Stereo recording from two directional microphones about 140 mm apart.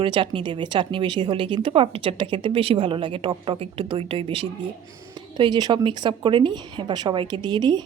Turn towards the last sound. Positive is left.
turn(degrees=-30)  # may be behind; listen again after turning